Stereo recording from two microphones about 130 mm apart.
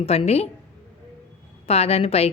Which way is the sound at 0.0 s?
50° left (ahead or behind).